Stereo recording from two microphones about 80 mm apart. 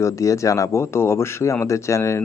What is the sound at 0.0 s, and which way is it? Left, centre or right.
Speech, left.